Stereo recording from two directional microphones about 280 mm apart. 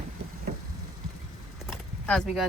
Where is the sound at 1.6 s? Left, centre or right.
Centre.